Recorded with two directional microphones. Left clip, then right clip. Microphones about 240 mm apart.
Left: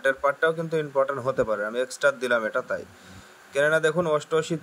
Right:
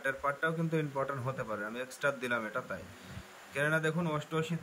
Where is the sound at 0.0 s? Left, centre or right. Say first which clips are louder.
Left 10 dB; left.